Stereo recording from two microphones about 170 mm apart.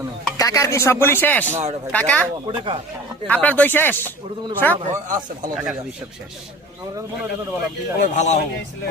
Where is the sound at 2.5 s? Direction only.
30° right (ahead or behind).